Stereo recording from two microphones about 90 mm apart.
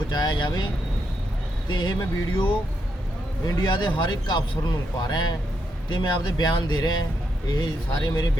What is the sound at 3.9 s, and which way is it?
Speech, 60° left (ahead or behind).